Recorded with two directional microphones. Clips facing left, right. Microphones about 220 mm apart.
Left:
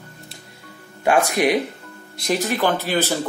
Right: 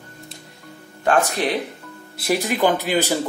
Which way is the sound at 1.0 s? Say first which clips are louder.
Left 2 dB; 10° left (ahead or behind).